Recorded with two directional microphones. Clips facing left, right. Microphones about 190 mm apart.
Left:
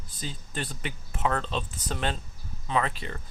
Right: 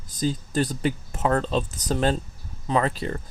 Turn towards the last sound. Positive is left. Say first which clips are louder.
# right 5 dB
turn(degrees=-40)  # may be behind; listen again after turning